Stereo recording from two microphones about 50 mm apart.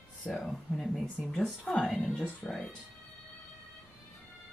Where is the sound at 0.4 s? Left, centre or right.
Centre.